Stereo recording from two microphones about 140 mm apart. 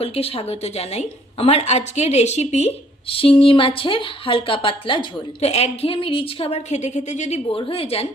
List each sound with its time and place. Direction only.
0.0 s a woman's voice: 45° left (ahead or behind)
7.5 s a woman's voice: 45° left (ahead or behind)